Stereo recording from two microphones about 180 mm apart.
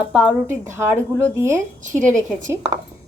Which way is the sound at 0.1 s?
5° right (ahead or behind).